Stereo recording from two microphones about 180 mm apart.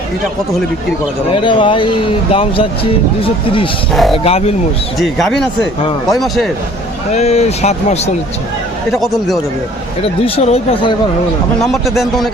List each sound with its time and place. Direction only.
1.3 s speech: 30° left (ahead or behind)
3.9 s speech: centre (ahead or behind)
4.2 s speech: 35° left (ahead or behind)
4.9 s speech: centre (ahead or behind)
7.1 s speech: 35° left (ahead or behind)
8.9 s speech: centre (ahead or behind)
10.0 s speech: 30° left (ahead or behind)
11.6 s speech: centre (ahead or behind)